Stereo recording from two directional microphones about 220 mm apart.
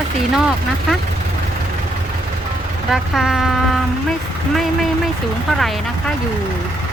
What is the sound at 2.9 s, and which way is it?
Speech, centre (ahead or behind).